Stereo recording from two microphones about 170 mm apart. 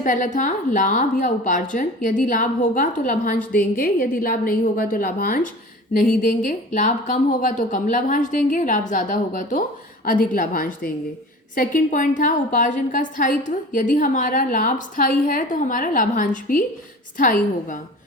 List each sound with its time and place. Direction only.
0.0 s a woman's voice: 50° left (ahead or behind)